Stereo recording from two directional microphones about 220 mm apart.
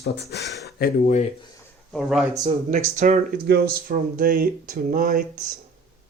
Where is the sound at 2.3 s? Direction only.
15° right (ahead or behind).